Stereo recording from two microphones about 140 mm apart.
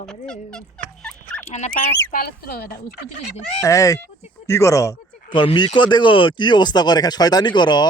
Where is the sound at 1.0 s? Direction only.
5° left (ahead or behind).